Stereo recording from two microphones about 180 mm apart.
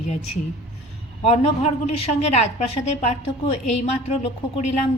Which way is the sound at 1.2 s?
35° left (ahead or behind).